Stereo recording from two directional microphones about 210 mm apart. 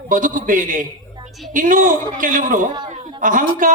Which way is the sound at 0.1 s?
40° right (ahead or behind).